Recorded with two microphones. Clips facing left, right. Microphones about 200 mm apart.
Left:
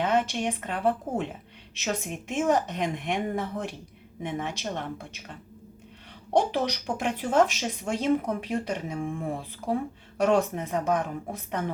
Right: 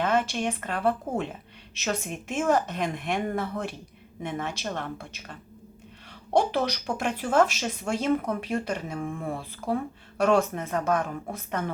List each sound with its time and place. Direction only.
0.0 s speech: 15° left (ahead or behind)
6.5 s speech: 15° left (ahead or behind)